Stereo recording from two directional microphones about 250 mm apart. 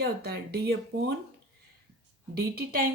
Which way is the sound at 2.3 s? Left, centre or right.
Right.